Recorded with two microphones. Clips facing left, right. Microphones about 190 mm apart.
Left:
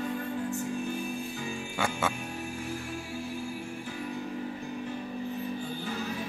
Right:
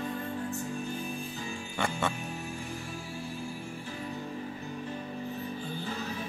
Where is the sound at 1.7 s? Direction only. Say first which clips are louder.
Even; 5° left (ahead or behind).